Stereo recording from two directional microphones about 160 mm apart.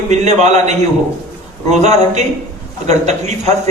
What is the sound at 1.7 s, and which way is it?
A man's voice, 45° right (ahead or behind).